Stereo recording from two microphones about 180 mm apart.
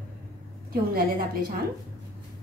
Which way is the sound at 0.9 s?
60° right (ahead or behind).